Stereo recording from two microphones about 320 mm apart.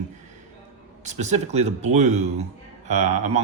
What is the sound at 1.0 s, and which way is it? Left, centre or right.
Speech, right.